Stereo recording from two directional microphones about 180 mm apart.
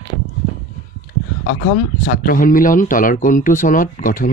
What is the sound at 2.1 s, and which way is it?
Speech, 50° left (ahead or behind).